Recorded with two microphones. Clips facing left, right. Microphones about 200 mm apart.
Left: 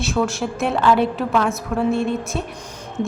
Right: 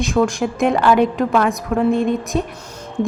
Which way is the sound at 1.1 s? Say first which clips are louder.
Right 3 dB; 5° right (ahead or behind).